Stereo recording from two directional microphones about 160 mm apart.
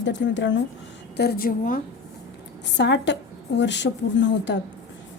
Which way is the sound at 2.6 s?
90° left.